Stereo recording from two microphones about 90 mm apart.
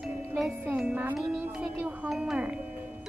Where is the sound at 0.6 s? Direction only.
15° right (ahead or behind).